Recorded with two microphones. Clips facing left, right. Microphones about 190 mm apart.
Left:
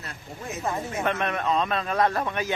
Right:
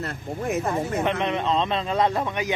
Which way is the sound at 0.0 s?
60° right (ahead or behind).